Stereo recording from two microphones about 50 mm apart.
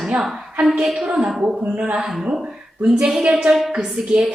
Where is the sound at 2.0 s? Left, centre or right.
Centre.